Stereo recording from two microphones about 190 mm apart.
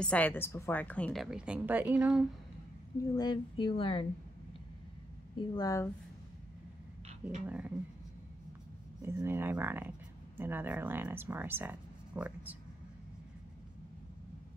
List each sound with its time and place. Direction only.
0.0 s a woman's voice: 5° left (ahead or behind)
3.2 s speech: 25° left (ahead or behind)
5.3 s speech: 25° left (ahead or behind)
7.2 s speech: 5° right (ahead or behind)
9.0 s speech: 15° right (ahead or behind)